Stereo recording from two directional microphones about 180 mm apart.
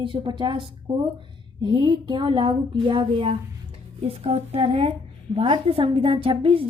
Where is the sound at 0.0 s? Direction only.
25° right (ahead or behind).